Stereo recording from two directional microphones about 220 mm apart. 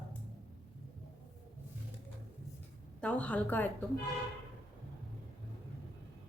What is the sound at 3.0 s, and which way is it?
Speech, 5° left (ahead or behind).